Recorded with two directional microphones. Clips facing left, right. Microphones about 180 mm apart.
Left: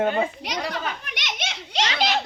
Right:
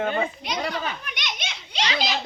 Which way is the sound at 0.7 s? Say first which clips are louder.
Even; 80° left.